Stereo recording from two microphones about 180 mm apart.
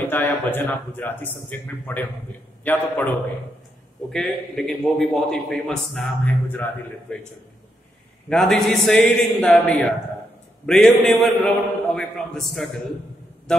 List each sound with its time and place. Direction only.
0.0 s speech: 10° left (ahead or behind)
4.1 s a man's voice: 5° left (ahead or behind)
8.3 s a man's voice: 5° left (ahead or behind)